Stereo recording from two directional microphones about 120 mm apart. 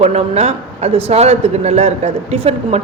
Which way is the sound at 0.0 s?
60° right (ahead or behind).